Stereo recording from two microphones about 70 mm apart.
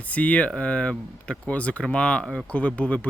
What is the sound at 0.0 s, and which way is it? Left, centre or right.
Speech, centre.